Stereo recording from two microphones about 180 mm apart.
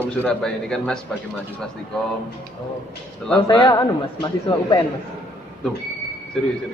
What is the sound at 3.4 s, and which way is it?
Speech, 25° left (ahead or behind).